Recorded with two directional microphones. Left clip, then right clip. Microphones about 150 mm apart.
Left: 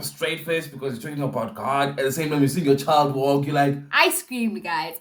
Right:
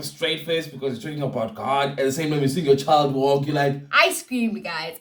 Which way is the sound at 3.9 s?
35° left (ahead or behind).